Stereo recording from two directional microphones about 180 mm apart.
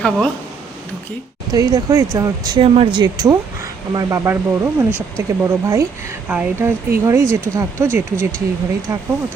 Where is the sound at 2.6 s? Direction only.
35° right (ahead or behind); by 7.8 s 15° right (ahead or behind).